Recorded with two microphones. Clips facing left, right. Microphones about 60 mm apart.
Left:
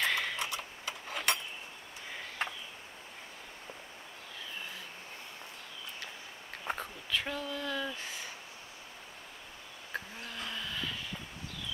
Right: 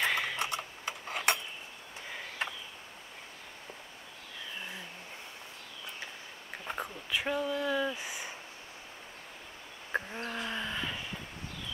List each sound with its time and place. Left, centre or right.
0.0 s typing: centre
0.4 s tick-tock: right
6.8 s speech: centre
9.9 s a sound: right